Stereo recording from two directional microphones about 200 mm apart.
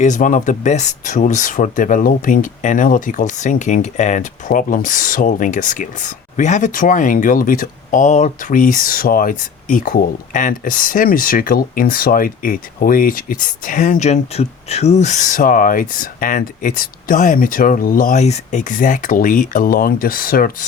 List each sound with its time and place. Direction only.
0.0 s speech: 40° left (ahead or behind)